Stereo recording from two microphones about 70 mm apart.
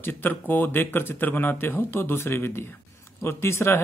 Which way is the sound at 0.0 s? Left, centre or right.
Left.